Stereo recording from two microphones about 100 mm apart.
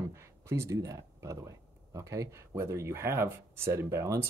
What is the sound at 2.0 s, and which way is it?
Speech, 30° right (ahead or behind).